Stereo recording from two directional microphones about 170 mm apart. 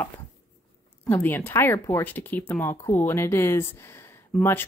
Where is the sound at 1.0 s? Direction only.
10° left (ahead or behind).